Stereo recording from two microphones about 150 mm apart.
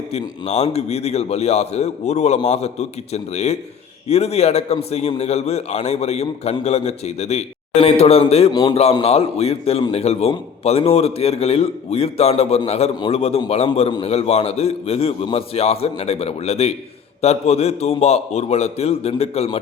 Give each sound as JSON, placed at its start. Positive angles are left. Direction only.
{"t": 0.1, "sound": "a man's voice", "side_deg": 50}